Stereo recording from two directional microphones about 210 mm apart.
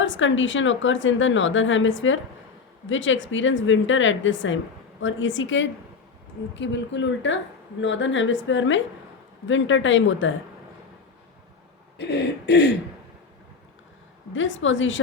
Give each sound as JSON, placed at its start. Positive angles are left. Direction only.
{"t": 0.0, "sound": "a woman's voice", "side_deg": 65}
{"t": 11.9, "sound": "a sound", "side_deg": 55}
{"t": 14.3, "sound": "a woman's voice", "side_deg": 65}